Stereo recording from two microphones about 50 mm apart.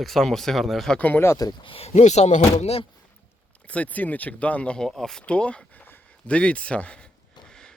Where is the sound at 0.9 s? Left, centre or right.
Left.